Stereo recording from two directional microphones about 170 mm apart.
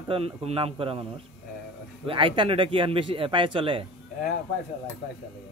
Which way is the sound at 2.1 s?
30° right (ahead or behind).